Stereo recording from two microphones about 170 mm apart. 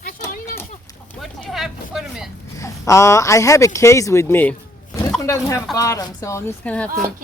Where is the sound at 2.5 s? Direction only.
20° left (ahead or behind).